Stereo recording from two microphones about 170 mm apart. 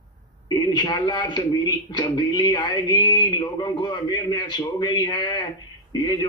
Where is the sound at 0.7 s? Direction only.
25° left (ahead or behind).